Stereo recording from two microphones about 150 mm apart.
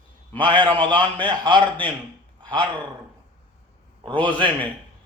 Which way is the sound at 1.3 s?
30° right (ahead or behind).